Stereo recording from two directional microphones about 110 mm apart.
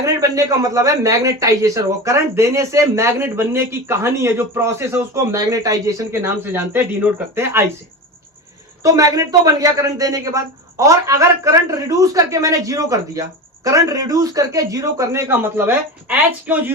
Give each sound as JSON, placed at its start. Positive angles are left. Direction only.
{"t": 0.0, "sound": "a man's voice", "side_deg": -30}
{"t": 8.8, "sound": "a man's voice", "side_deg": -30}